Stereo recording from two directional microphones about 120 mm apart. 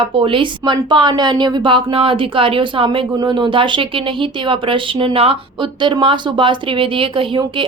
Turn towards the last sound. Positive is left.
turn(degrees=-45)  # may be behind; listen again after turning